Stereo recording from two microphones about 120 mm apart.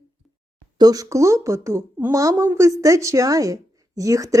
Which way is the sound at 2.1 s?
30° right (ahead or behind).